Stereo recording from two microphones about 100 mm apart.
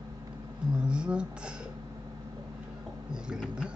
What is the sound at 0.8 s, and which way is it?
Speech, 10° right (ahead or behind).